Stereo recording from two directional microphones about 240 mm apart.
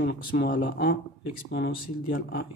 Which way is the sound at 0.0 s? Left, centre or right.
Left.